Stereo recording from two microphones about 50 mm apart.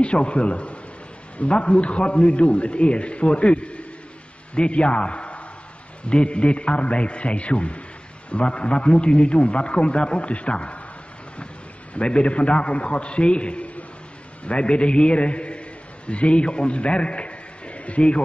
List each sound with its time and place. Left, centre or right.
0.0 s a man's voice: left
11.9 s a man's voice: left